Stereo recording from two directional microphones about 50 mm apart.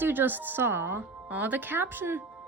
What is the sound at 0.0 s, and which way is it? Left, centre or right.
A woman's voice, right.